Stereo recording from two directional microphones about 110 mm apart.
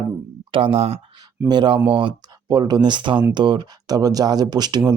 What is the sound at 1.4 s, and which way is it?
Speech, 45° right (ahead or behind).